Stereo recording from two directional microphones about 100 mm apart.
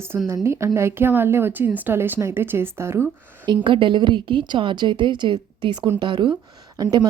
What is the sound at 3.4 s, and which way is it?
A woman's voice, 55° right (ahead or behind).